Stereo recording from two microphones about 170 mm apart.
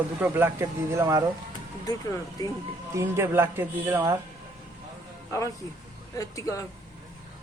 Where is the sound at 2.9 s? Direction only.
15° right (ahead or behind).